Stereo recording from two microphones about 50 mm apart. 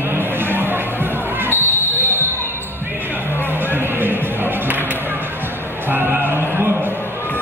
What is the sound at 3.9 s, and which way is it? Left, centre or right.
Music, right.